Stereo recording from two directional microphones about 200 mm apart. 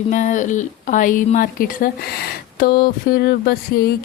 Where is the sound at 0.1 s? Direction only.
40° left (ahead or behind).